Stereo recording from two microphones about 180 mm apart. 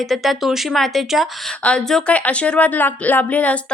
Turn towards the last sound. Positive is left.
turn(degrees=10)  # may be behind; listen again after turning